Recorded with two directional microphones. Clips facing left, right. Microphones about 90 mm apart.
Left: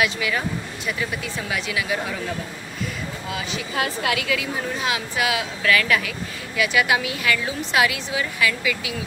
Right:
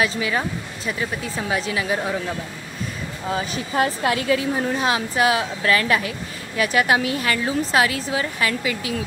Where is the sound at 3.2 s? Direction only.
35° right (ahead or behind).